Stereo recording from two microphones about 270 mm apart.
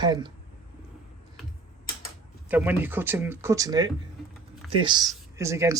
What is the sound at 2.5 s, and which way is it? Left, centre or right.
Speech, centre.